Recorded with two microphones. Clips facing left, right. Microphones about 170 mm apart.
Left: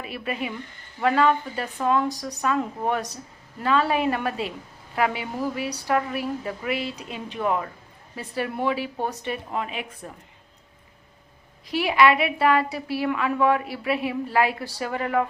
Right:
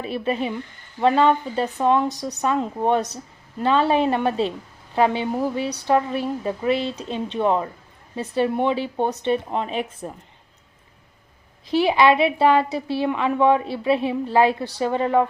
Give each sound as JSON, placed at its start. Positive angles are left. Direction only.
{"t": 0.0, "sound": "a woman's voice", "side_deg": -30}
{"t": 11.7, "sound": "a woman's voice", "side_deg": -25}